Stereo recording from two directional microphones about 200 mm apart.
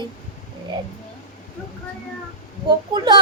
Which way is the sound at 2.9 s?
20° right (ahead or behind).